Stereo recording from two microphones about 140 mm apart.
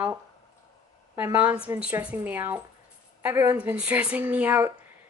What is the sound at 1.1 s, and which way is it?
A woman's voice, 15° right (ahead or behind).